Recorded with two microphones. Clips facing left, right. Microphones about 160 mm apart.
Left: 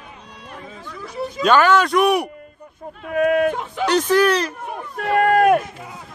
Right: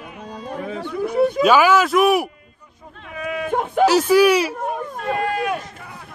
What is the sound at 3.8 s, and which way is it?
Speech, 5° right (ahead or behind).